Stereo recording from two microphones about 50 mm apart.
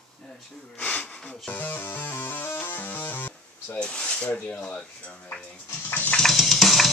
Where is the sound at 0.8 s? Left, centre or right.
Left.